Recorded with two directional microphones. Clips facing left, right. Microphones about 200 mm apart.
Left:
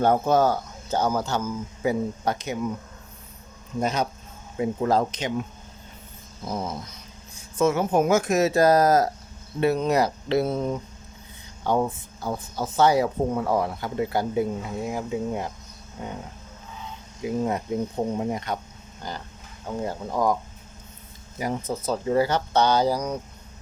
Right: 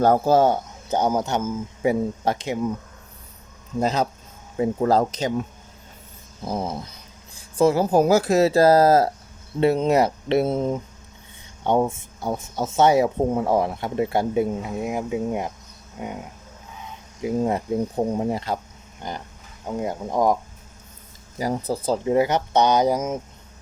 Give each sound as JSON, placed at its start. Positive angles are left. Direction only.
{"t": 0.0, "sound": "speech", "side_deg": -35}
{"t": 3.8, "sound": "speech", "side_deg": -30}
{"t": 6.4, "sound": "speech", "side_deg": -30}
{"t": 17.2, "sound": "speech", "side_deg": -30}
{"t": 21.3, "sound": "speech", "side_deg": -35}
{"t": 22.0, "sound": "speech", "side_deg": -15}